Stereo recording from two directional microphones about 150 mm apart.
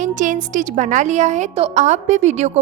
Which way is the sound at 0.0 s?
55° right (ahead or behind).